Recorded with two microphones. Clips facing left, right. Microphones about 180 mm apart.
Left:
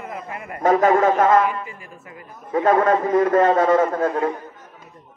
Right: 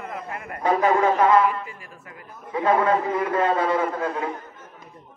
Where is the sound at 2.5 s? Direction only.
45° left (ahead or behind).